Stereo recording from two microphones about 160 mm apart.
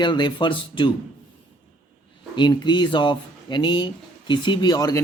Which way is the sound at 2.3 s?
30° left (ahead or behind).